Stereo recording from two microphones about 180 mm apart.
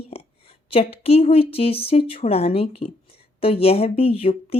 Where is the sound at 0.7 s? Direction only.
30° left (ahead or behind).